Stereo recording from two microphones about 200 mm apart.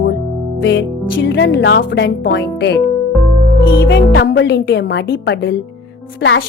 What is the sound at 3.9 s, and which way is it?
Speech, 65° left (ahead or behind).